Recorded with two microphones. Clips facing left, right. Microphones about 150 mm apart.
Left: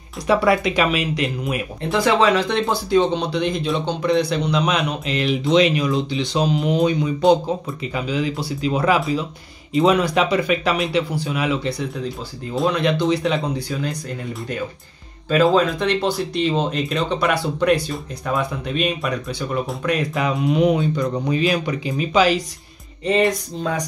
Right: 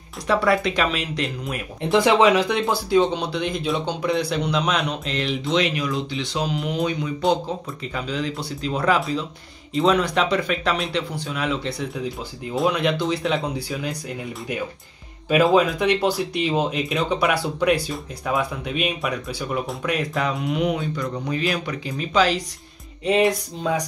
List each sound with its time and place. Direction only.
0.3 s speech: 10° left (ahead or behind)
1.8 s speech: 20° right (ahead or behind); by 5.5 s 5° left (ahead or behind)
5.5 s speech: 20° left (ahead or behind)
7.8 s speech: 5° left (ahead or behind)
15.5 s speech: 10° right (ahead or behind)
20.3 s speech: 30° left (ahead or behind); by 22.4 s 10° left (ahead or behind)
23.0 s speech: 5° right (ahead or behind)